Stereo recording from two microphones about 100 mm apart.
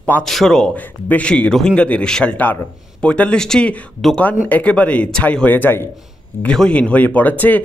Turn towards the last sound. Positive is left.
turn(degrees=15)  # may be behind; listen again after turning